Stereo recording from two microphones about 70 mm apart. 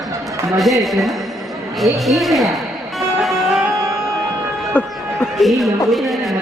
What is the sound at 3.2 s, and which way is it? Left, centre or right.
Music, centre.